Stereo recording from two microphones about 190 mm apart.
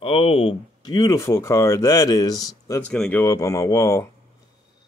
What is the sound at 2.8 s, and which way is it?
Speech, 5° left (ahead or behind).